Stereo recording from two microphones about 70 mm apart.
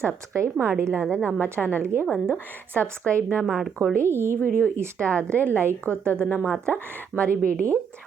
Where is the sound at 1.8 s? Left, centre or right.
Right.